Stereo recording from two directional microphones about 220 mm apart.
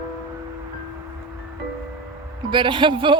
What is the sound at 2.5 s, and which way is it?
Speech, 20° right (ahead or behind).